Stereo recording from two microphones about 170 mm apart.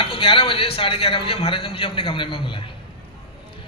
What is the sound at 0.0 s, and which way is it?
A man's voice, 30° left (ahead or behind).